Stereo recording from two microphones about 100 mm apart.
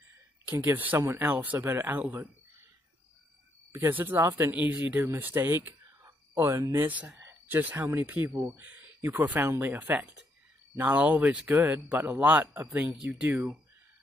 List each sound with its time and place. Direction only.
0.7 s speech: 20° right (ahead or behind)
3.7 s speech: 20° right (ahead or behind)
4.5 s speech: 15° right (ahead or behind)
6.0 s whispering: 25° right (ahead or behind)
6.5 s speech: 30° right (ahead or behind)
6.9 s speech: 20° right (ahead or behind)